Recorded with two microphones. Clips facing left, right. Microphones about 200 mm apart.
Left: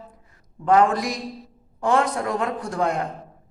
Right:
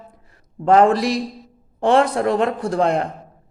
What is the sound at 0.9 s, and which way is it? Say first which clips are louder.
Speech: right 6 dB; 75° right (ahead or behind).